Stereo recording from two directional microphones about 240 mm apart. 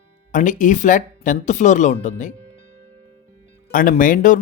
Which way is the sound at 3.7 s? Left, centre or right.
Left.